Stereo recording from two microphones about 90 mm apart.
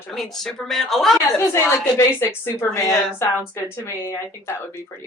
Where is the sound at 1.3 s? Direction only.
25° left (ahead or behind).